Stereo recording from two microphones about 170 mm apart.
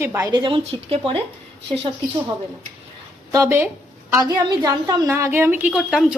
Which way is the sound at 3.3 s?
15° right (ahead or behind).